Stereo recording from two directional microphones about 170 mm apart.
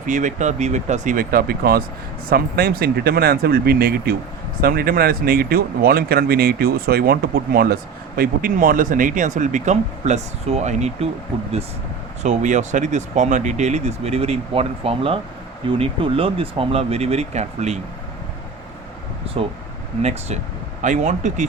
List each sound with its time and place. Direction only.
0.0 s speech: 50° right (ahead or behind)
12.2 s speech: 45° right (ahead or behind)
20.0 s speech: 40° right (ahead or behind)